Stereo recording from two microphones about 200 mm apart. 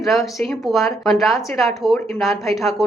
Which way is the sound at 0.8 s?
15° left (ahead or behind).